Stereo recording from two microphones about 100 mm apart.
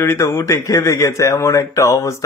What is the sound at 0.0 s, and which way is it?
Speech, 30° left (ahead or behind).